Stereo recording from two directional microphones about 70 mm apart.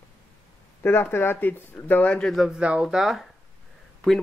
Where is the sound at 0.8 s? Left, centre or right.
Left.